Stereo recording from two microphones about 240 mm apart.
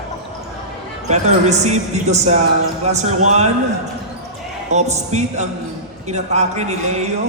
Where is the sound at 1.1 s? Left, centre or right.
Right.